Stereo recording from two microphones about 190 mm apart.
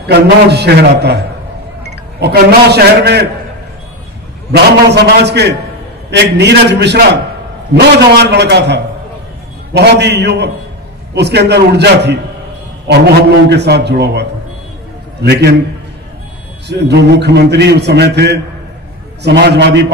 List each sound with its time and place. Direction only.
0.0 s a man's voice: 60° right (ahead or behind)
4.5 s a man's voice: 60° right (ahead or behind)
16.6 s a man's voice: 65° right (ahead or behind)